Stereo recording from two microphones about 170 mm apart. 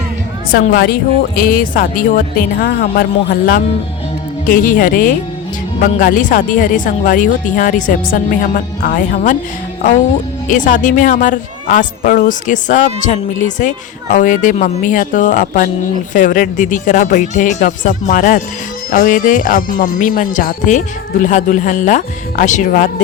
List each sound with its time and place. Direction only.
0.7 s speech: 60° left (ahead or behind)
10.5 s speech: 50° left (ahead or behind)